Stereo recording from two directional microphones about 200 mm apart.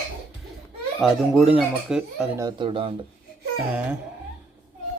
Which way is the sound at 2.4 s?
20° right (ahead or behind).